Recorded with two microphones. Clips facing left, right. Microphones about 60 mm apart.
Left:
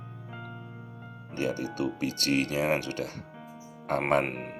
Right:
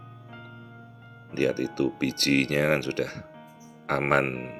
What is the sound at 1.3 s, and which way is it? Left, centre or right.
Speech, right.